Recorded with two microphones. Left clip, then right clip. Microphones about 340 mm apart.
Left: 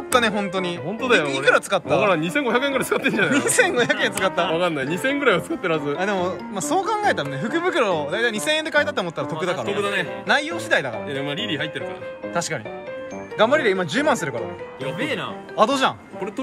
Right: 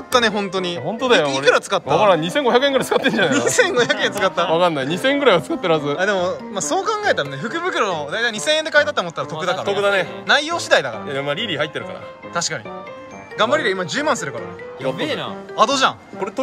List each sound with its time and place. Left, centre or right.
0.1 s speech: centre
2.0 s speech: right
3.3 s speech: centre
4.5 s speech: right
5.9 s speech: centre
9.8 s speech: right
10.2 s speech: centre
11.1 s speech: right
13.4 s speech: centre
14.9 s speech: right
15.5 s speech: centre